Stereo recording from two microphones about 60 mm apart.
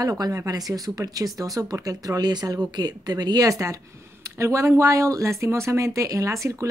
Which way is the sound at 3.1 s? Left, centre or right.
Right.